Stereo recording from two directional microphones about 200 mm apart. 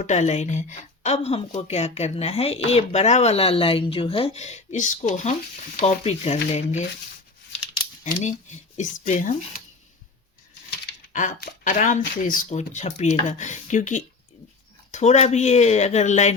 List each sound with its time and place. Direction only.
0.0 s speech: 35° left (ahead or behind)
8.8 s speech: 40° left (ahead or behind)
11.1 s speech: 40° left (ahead or behind)